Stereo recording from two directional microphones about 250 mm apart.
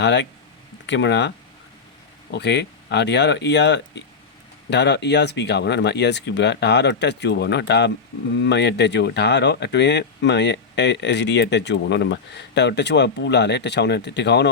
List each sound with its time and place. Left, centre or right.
0.0 s speech: left
2.3 s speech: left